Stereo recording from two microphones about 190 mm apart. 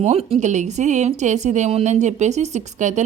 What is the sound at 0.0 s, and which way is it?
Speech, 35° right (ahead or behind).